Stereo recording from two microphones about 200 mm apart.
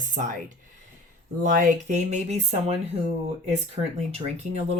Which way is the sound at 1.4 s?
40° right (ahead or behind).